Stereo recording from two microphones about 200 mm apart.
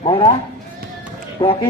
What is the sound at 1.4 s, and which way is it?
Speech, 25° left (ahead or behind).